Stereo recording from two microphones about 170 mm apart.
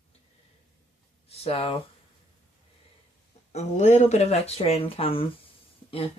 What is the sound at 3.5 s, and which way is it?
Speech, 40° left (ahead or behind).